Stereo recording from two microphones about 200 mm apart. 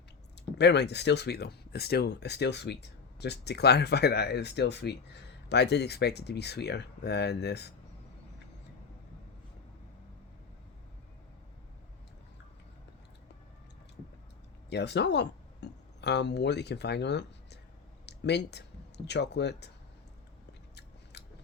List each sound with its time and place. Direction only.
0.6 s speech: 55° left (ahead or behind)
14.7 s speech: 60° left (ahead or behind)
18.0 s a sound: 55° left (ahead or behind)
19.0 s speech: 55° left (ahead or behind)
20.5 s scissors: 55° left (ahead or behind)